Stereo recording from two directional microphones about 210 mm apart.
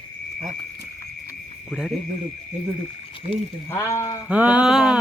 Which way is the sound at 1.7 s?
Centre (ahead or behind).